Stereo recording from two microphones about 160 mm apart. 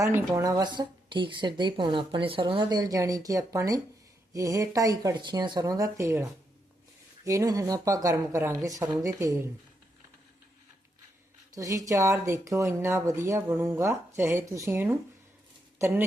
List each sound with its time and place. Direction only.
0.0 s speech: 15° right (ahead or behind)
7.3 s speech: 20° right (ahead or behind)
11.5 s speech: 20° right (ahead or behind)